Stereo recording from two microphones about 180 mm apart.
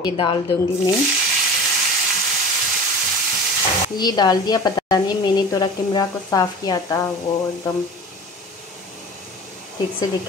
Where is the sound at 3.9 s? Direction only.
20° left (ahead or behind).